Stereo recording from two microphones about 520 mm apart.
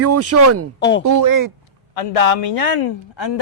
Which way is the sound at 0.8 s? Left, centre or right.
Left.